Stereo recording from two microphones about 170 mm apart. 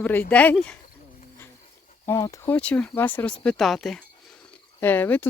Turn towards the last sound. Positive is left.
turn(degrees=10)  # may be behind; listen again after turning